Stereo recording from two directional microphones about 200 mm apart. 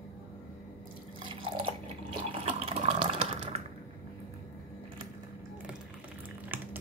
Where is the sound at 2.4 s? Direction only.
30° right (ahead or behind).